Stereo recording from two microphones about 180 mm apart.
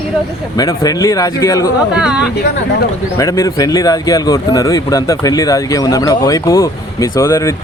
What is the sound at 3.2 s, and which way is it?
Speech, 15° left (ahead or behind).